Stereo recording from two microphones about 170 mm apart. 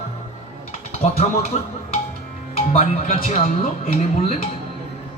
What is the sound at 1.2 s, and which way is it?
Speech, 35° left (ahead or behind).